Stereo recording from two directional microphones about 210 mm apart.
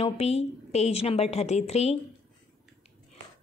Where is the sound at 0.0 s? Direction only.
30° left (ahead or behind).